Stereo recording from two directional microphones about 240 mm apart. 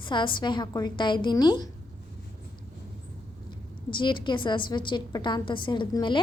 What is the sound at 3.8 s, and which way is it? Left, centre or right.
A woman's voice, centre.